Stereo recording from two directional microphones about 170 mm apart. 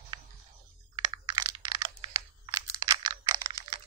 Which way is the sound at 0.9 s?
30° right (ahead or behind).